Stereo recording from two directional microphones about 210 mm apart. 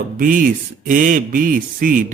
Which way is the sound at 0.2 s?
40° right (ahead or behind).